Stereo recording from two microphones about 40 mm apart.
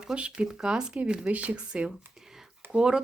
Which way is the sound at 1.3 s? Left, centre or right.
Right.